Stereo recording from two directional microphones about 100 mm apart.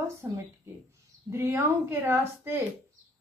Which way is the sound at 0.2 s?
20° right (ahead or behind).